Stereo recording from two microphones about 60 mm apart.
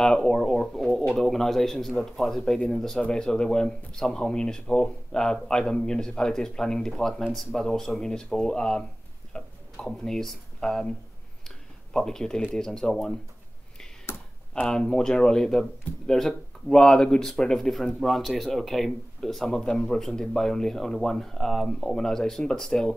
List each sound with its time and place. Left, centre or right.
0.0 s speech: centre
9.8 s speech: centre
11.4 s a sound: centre
12.5 s speech: centre
14.5 s speech: centre